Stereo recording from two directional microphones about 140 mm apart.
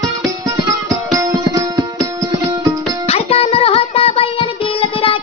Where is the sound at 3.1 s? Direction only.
45° left (ahead or behind).